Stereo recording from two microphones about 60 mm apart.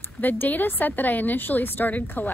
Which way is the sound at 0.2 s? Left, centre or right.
Left.